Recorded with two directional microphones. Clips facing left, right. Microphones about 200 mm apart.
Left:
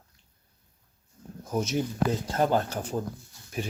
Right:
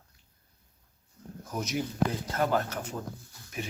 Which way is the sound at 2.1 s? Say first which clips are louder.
Left 3 dB; 30° left (ahead or behind).